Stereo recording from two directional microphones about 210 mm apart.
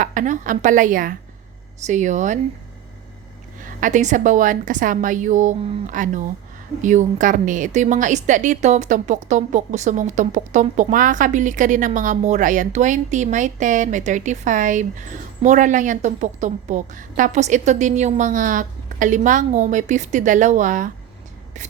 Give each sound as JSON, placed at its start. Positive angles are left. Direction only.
{"t": 0.0, "sound": "a woman's voice", "side_deg": -40}
{"t": 3.6, "sound": "a woman's voice", "side_deg": -40}